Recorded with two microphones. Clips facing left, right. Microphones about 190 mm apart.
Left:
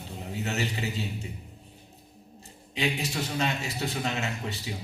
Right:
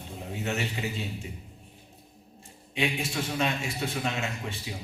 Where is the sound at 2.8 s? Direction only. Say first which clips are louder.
Even; 40° left (ahead or behind).